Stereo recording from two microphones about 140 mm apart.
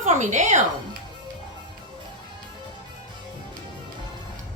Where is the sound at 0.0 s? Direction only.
60° right (ahead or behind).